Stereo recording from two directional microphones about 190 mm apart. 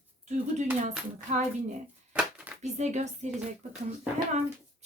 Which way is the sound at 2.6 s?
40° right (ahead or behind).